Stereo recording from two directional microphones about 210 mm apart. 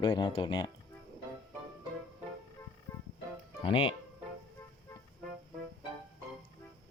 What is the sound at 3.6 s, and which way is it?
Speech, 25° left (ahead or behind).